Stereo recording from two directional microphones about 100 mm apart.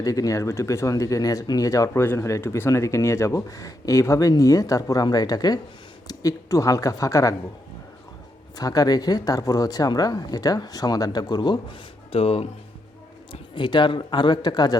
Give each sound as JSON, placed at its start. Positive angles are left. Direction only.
{"t": 0.0, "sound": "speech", "side_deg": 35}
{"t": 1.9, "sound": "speech", "side_deg": 25}
{"t": 8.5, "sound": "speech", "side_deg": 40}
{"t": 12.1, "sound": "speech", "side_deg": 75}
{"t": 13.3, "sound": "speech", "side_deg": 55}